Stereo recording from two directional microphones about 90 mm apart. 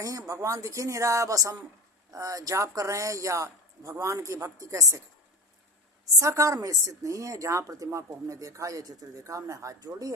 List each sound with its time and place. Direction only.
0.0 s a woman's voice: 40° right (ahead or behind)
6.1 s a woman's voice: 35° right (ahead or behind)